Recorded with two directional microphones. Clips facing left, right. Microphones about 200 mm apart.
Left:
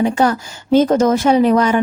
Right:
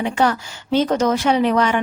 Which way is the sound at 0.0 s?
40° left (ahead or behind).